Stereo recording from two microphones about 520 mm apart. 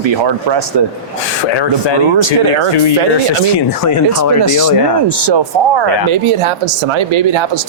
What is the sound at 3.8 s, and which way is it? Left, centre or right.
Speech, left.